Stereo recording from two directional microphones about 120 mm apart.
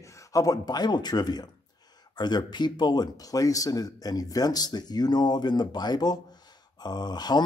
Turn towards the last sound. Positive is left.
turn(degrees=35)  # may be behind; listen again after turning